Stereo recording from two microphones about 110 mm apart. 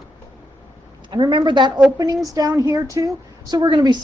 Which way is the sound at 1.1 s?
45° right (ahead or behind).